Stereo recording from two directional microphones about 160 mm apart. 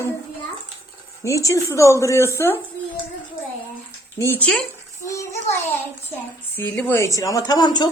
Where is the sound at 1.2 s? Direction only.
20° left (ahead or behind).